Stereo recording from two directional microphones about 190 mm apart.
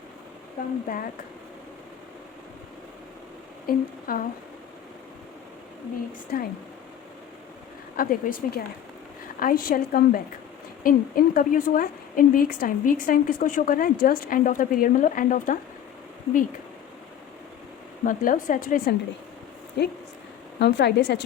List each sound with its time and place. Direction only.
0.9 s a woman's voice: 50° left (ahead or behind)
3.7 s a woman's voice: 50° left (ahead or behind)
6.3 s a woman's voice: 55° left (ahead or behind)
7.9 s a woman's voice: 50° left (ahead or behind)
18.0 s a woman's voice: 45° left (ahead or behind)
19.8 s a woman's voice: 60° left (ahead or behind)